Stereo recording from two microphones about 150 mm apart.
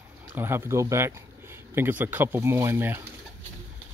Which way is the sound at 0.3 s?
15° right (ahead or behind).